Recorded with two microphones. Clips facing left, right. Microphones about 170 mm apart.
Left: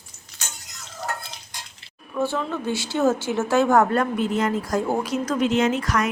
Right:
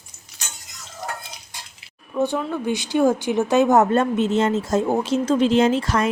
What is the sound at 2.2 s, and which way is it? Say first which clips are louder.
Speech: right 2 dB; 15° right (ahead or behind).